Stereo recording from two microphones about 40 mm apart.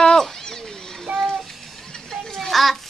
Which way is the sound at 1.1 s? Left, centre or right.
Right.